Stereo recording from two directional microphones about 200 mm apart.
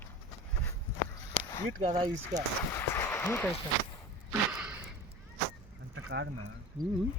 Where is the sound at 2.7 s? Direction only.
10° left (ahead or behind).